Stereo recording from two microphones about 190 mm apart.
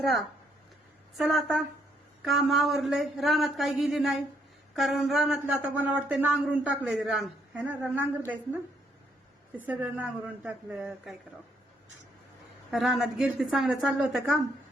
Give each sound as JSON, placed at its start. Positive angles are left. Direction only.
{"t": 0.0, "sound": "speech", "side_deg": 0}
{"t": 9.6, "sound": "speech", "side_deg": -10}
{"t": 12.7, "sound": "speech", "side_deg": 0}